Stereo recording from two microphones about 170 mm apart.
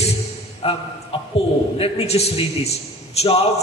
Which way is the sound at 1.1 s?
35° left (ahead or behind).